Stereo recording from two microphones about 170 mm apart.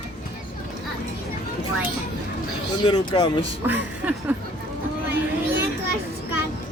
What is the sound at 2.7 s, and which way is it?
Speech, 25° left (ahead or behind).